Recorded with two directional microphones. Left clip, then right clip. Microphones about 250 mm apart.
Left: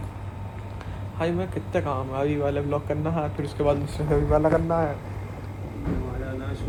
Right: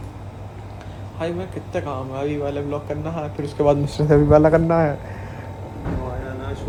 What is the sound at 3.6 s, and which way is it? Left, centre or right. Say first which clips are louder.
A man's voice: right 7 dB; right.